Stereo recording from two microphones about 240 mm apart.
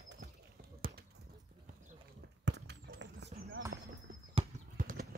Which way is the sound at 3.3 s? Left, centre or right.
Right.